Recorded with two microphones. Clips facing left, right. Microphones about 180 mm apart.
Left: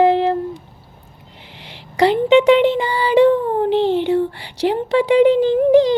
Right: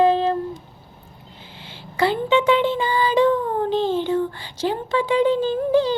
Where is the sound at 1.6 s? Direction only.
75° left (ahead or behind).